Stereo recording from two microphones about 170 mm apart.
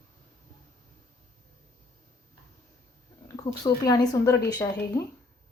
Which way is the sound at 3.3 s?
20° left (ahead or behind).